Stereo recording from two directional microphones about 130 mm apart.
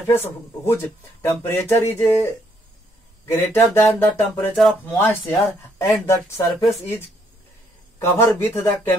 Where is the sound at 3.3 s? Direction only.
20° left (ahead or behind).